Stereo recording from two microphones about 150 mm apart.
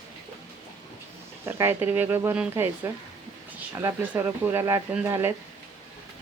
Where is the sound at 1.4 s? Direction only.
15° right (ahead or behind).